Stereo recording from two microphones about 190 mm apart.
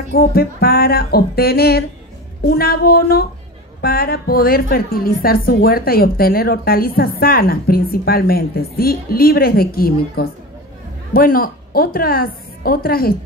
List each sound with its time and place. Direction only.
0.1 s a woman's voice: 55° left (ahead or behind)